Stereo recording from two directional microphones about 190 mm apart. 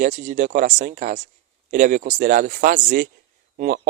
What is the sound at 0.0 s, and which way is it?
Speech, 45° right (ahead or behind).